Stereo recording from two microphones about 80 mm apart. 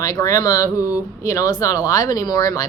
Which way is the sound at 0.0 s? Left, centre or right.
Left.